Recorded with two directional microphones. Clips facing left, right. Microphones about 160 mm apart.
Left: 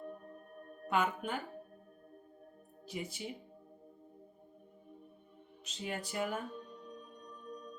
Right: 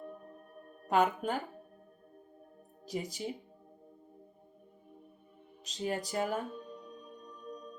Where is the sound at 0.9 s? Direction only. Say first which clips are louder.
Right 5 dB; 40° right (ahead or behind).